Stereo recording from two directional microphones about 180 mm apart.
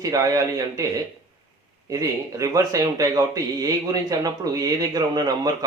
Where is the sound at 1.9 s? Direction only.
20° right (ahead or behind).